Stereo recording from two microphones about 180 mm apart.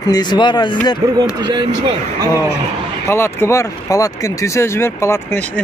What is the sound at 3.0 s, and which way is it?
Speech, 15° left (ahead or behind).